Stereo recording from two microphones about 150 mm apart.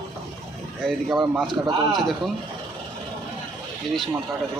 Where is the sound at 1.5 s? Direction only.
30° right (ahead or behind).